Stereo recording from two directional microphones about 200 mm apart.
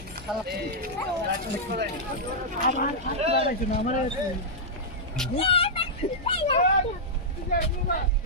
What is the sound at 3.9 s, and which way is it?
Speech, 40° left (ahead or behind).